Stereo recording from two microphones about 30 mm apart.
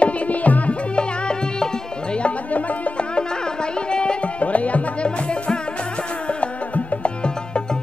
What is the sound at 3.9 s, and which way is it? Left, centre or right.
Music, left.